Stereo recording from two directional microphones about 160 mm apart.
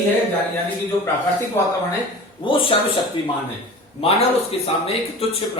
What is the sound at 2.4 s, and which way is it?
Speech, 30° left (ahead or behind).